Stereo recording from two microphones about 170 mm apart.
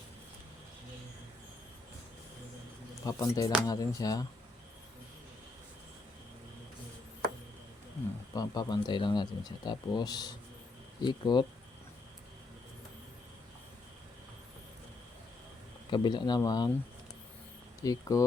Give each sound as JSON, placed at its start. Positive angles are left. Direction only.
{"t": 3.0, "sound": "speech", "side_deg": 20}
{"t": 8.3, "sound": "speech", "side_deg": 25}
{"t": 15.9, "sound": "speech", "side_deg": 25}
{"t": 17.8, "sound": "speech", "side_deg": 20}